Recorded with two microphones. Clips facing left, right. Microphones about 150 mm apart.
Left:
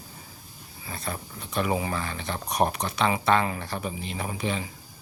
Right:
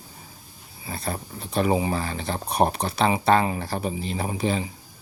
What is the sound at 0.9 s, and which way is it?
Speech, 35° right (ahead or behind).